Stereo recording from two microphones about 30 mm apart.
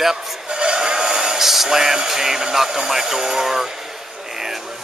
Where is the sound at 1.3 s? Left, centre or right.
Centre.